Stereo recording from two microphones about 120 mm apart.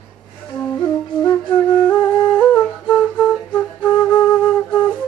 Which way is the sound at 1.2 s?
40° left (ahead or behind).